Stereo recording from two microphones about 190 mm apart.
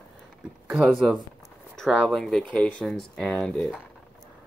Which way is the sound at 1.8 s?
Centre (ahead or behind).